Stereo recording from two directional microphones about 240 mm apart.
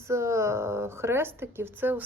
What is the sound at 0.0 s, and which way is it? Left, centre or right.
A woman's voice, centre.